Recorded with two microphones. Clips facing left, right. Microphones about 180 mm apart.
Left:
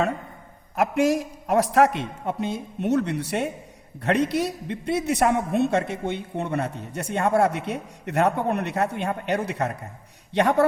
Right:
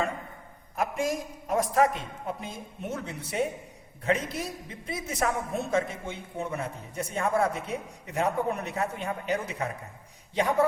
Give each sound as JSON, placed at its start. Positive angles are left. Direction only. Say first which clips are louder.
{"t": 0.8, "sound": "a man's voice", "louder": "left 8 dB", "side_deg": 75}